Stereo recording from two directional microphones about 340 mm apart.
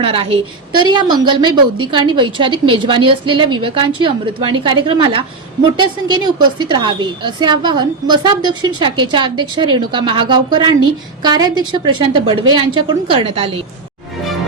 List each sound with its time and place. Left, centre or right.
0.0 s a woman's voice: centre